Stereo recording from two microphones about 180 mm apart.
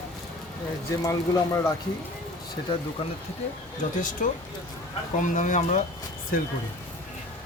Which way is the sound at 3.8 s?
45° left (ahead or behind).